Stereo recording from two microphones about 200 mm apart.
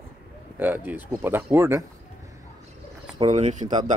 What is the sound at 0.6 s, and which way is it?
Speech, 10° right (ahead or behind).